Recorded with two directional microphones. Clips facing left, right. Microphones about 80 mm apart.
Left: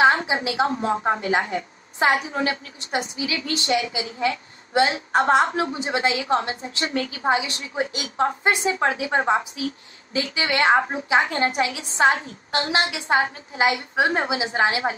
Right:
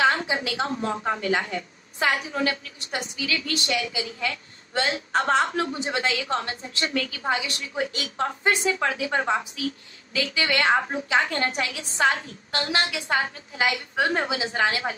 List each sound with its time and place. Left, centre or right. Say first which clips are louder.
0.0 s a woman's voice: left 4 dB; left